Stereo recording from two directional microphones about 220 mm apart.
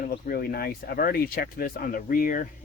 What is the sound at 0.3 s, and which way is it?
Speech, 45° left (ahead or behind).